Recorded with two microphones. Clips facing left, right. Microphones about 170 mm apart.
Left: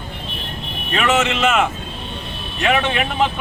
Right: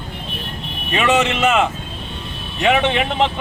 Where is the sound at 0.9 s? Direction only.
15° right (ahead or behind).